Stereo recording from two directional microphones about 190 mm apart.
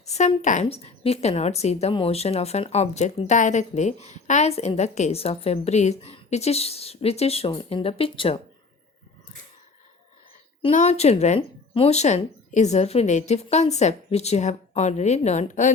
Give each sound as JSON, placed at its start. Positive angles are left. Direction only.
{"t": 0.0, "sound": "speech", "side_deg": 35}
{"t": 10.7, "sound": "speech", "side_deg": 40}